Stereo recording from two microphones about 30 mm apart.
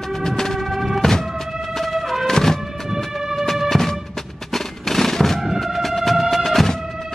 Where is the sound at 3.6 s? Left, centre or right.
Centre.